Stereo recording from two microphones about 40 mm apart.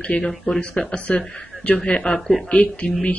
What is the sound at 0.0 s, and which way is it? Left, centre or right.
A man's voice, left.